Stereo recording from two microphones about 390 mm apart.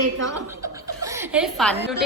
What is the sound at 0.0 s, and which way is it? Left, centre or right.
Speech, right.